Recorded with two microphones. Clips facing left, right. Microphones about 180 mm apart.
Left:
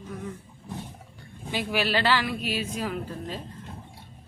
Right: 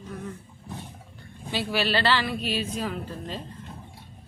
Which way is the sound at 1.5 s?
10° left (ahead or behind).